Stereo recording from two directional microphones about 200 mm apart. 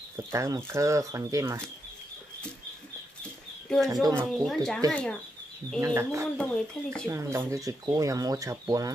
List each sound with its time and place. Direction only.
0.3 s speech: 15° right (ahead or behind)
3.8 s speech: 15° right (ahead or behind)
4.3 s speech: centre (ahead or behind)
5.8 s speech: 15° right (ahead or behind)
6.3 s speech: 5° left (ahead or behind)
7.1 s speech: 15° right (ahead or behind)